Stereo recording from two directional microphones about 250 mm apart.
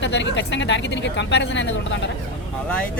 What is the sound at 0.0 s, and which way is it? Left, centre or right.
Speech, left.